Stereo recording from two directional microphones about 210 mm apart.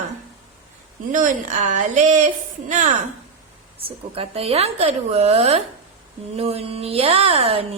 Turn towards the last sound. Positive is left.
turn(degrees=-30)  # may be behind; listen again after turning